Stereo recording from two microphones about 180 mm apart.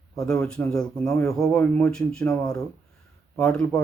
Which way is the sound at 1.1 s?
15° left (ahead or behind).